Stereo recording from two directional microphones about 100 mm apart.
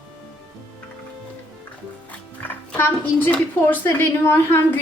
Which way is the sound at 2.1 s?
15° left (ahead or behind).